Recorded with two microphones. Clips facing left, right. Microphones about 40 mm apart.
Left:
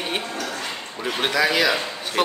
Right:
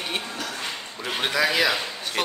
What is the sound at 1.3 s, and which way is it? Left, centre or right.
Speech, centre.